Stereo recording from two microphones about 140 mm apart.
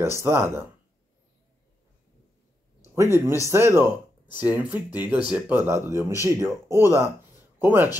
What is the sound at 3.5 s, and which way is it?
A man's voice, 15° right (ahead or behind).